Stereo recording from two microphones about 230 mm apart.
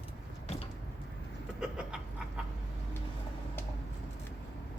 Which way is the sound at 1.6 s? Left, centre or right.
Centre.